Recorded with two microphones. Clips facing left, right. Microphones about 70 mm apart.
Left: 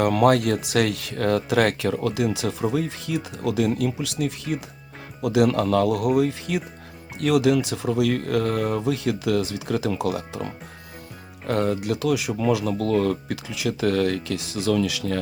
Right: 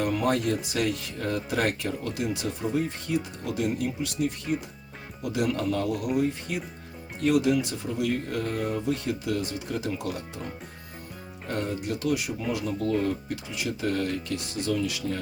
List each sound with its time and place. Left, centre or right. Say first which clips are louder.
0.0 s speech: left 7 dB; left